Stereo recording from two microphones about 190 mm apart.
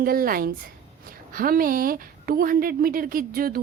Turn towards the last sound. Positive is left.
turn(degrees=-50)  # may be behind; listen again after turning